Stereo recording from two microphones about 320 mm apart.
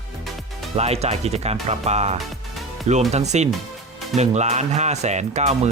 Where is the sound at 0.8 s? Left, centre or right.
Centre.